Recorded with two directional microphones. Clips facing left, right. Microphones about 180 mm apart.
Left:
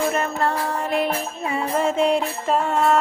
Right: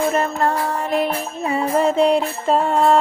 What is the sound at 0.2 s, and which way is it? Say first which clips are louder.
Music: right 3 dB; 40° right (ahead or behind).